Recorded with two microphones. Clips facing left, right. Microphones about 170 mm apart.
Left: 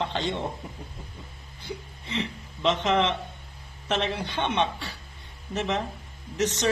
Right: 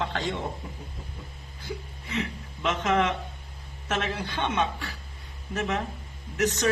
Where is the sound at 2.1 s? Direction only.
25° left (ahead or behind).